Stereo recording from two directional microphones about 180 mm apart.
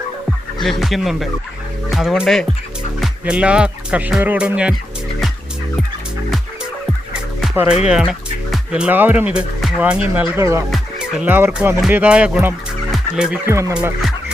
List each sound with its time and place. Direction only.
0.6 s speech: centre (ahead or behind)
7.1 s music: 5° right (ahead or behind)
7.9 s speech: 5° right (ahead or behind)
13.5 s fowl: 15° right (ahead or behind)